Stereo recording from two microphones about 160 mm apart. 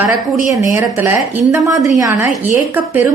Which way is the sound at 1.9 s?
20° right (ahead or behind).